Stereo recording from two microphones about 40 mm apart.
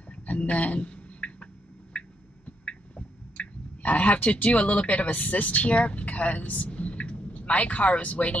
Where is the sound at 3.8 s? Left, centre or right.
Left.